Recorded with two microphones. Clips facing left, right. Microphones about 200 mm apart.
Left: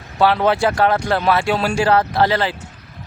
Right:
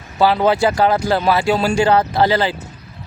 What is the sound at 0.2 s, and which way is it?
Speech, centre (ahead or behind).